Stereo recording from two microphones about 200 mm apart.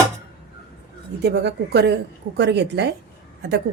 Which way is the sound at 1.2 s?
55° right (ahead or behind).